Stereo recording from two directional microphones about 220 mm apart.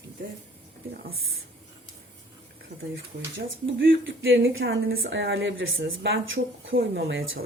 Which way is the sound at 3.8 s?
55° right (ahead or behind).